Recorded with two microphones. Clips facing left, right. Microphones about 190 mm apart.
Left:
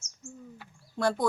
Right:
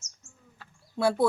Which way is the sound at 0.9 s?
5° right (ahead or behind).